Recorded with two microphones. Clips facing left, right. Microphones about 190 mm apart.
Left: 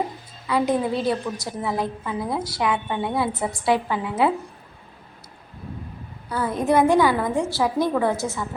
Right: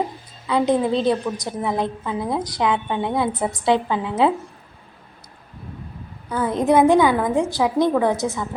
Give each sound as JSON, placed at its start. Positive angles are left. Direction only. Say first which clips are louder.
{"t": 0.4, "sound": "a woman's voice", "louder": "right 3 dB", "side_deg": -20}
{"t": 6.2, "sound": "a woman's voice", "louder": "right 3 dB", "side_deg": -20}